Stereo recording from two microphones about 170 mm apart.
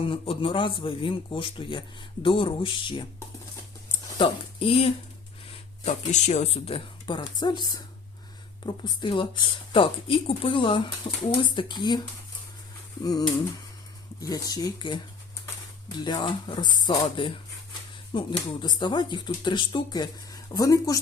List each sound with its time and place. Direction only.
0.0 s speech: 30° left (ahead or behind)
3.8 s a sound: 30° left (ahead or behind)
5.5 s speech: 40° left (ahead or behind)
13.0 s speech: 25° left (ahead or behind)